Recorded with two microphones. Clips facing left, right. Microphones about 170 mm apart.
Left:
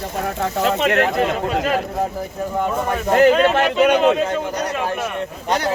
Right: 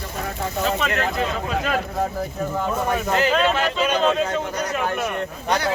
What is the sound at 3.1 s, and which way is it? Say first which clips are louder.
Speech: left 8 dB; 55° left (ahead or behind).